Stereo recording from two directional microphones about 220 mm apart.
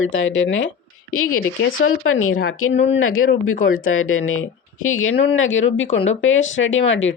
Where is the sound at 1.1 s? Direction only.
70° left (ahead or behind).